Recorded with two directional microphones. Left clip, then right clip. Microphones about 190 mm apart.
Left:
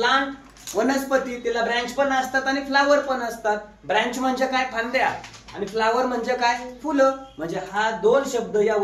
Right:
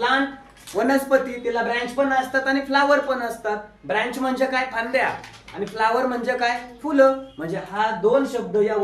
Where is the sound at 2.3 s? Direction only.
15° right (ahead or behind).